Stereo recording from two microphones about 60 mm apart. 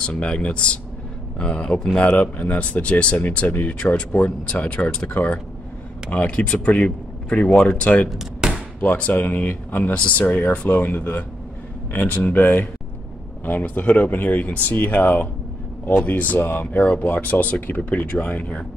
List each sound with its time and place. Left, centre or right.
0.0 s speech: centre
2.0 s speech: left
8.1 s a sound: centre
8.8 s speech: left